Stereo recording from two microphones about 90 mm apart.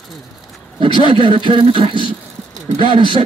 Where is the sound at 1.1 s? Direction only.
70° right (ahead or behind).